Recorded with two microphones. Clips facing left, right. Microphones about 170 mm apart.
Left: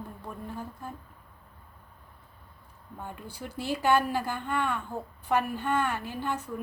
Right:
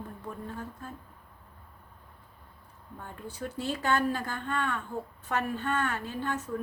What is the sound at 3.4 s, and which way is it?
A woman's voice, 10° left (ahead or behind).